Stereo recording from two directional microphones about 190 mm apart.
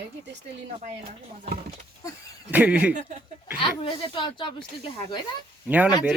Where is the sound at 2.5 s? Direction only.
10° right (ahead or behind).